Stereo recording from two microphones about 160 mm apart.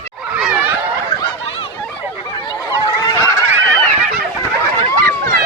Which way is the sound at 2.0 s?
25° left (ahead or behind).